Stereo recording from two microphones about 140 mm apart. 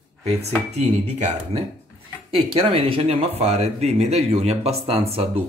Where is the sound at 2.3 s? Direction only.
40° right (ahead or behind).